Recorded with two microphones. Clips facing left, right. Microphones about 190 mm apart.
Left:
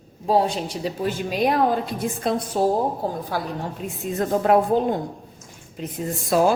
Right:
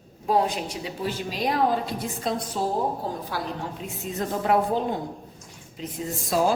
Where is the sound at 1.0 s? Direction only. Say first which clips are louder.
Left 5 dB; 55° left (ahead or behind).